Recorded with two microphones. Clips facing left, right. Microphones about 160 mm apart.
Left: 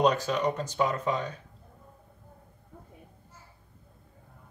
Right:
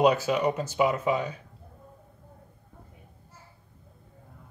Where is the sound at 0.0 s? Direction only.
5° right (ahead or behind).